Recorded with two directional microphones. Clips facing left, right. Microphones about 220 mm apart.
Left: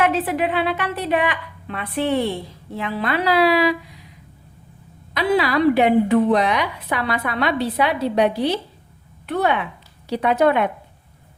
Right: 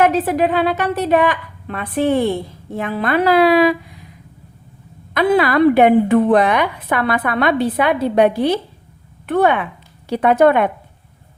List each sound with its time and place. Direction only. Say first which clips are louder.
0.0 s a woman's voice: right 5 dB; 40° right (ahead or behind)
5.1 s a woman's voice: right 4 dB; 50° right (ahead or behind)